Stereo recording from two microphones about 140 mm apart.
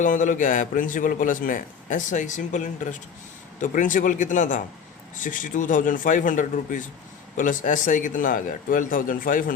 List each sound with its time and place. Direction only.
0.0 s a man's voice: 65° left (ahead or behind)